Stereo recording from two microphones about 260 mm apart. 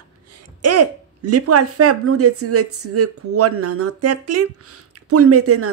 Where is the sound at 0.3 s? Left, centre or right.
Right.